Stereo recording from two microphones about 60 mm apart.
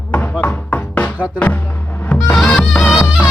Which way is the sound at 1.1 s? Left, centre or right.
Right.